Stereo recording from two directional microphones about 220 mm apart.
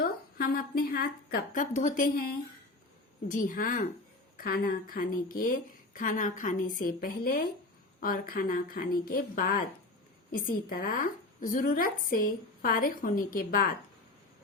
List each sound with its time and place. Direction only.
0.0 s a woman's voice: 45° left (ahead or behind)